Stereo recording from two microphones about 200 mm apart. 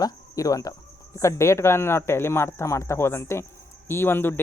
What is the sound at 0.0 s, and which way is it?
Cricket, 15° left (ahead or behind).